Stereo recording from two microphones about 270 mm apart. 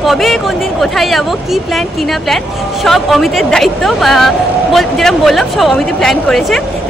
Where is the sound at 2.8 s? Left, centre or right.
Centre.